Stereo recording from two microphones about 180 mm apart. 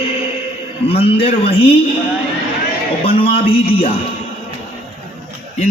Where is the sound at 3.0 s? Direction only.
30° left (ahead or behind).